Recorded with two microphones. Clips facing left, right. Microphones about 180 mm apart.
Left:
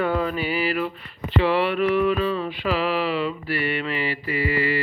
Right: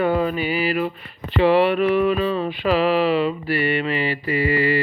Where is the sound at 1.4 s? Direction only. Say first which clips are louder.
Right 5 dB; 20° right (ahead or behind).